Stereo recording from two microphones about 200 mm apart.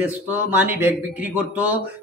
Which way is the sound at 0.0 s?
10° right (ahead or behind).